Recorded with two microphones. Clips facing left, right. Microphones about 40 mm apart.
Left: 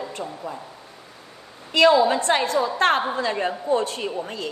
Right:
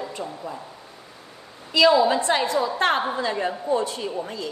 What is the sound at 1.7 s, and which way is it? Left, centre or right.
A woman's voice, left.